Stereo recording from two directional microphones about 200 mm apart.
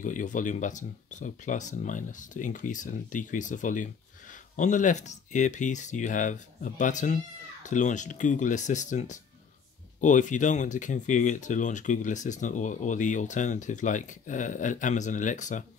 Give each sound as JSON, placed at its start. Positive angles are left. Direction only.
{"t": 0.0, "sound": "speech", "side_deg": 40}